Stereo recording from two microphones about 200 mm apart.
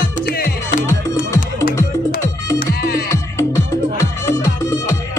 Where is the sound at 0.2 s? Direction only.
50° left (ahead or behind).